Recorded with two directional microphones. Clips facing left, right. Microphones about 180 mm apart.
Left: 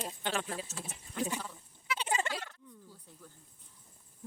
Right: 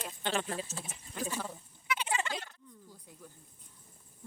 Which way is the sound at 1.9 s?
40° left (ahead or behind).